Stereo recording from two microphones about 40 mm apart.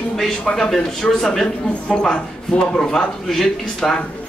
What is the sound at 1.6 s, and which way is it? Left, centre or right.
Speech, left.